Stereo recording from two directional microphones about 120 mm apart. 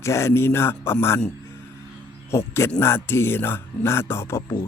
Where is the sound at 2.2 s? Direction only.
20° left (ahead or behind).